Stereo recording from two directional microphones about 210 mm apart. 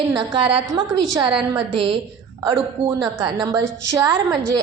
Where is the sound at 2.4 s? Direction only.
15° right (ahead or behind).